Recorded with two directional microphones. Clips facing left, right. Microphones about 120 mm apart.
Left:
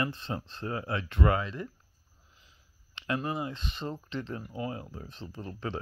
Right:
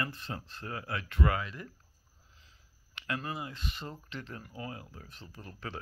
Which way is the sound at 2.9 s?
25° left (ahead or behind).